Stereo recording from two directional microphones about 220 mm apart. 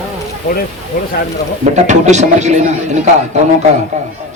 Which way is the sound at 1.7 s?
30° right (ahead or behind).